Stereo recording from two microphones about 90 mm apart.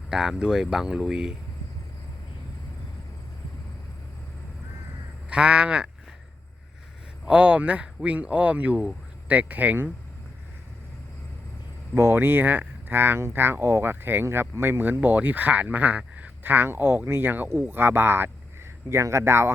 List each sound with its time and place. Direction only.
0.1 s speech: 5° right (ahead or behind)
5.3 s speech: 10° right (ahead or behind)
7.3 s speech: 15° right (ahead or behind)
11.9 s speech: 30° right (ahead or behind)